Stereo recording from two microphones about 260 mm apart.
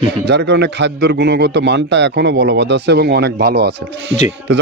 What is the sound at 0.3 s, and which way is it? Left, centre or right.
Speech, right.